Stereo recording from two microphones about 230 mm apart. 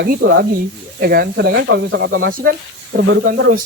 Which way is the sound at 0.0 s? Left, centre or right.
Right.